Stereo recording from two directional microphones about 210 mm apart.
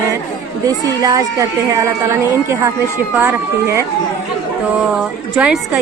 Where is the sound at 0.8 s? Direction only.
15° right (ahead or behind).